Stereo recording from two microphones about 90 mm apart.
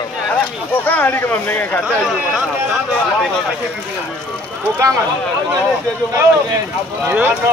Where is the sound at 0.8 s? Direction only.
20° left (ahead or behind).